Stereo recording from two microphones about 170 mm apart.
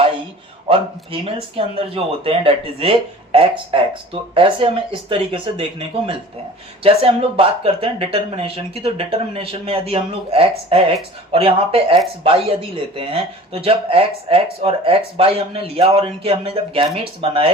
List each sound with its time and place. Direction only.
0.7 s speech: 35° right (ahead or behind)
6.8 s speech: 35° right (ahead or behind)